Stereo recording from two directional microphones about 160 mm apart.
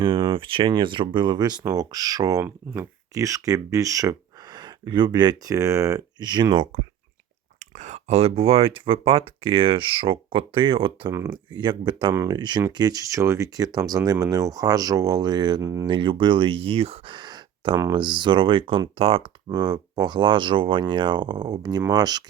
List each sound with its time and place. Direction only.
0.0 s speech: 35° right (ahead or behind)
7.8 s speech: 45° right (ahead or behind); by 11.1 s 30° right (ahead or behind)
11.1 s speech: 15° right (ahead or behind)
11.5 s speech: 30° right (ahead or behind)
15.9 s speech: 30° right (ahead or behind)